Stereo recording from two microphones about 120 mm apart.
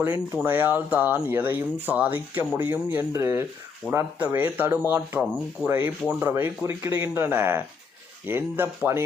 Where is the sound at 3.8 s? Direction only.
10° left (ahead or behind).